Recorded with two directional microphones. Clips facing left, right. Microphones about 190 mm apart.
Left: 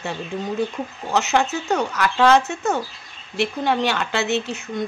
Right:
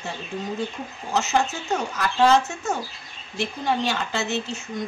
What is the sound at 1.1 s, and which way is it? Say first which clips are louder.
Speech: left 3 dB; 65° left (ahead or behind).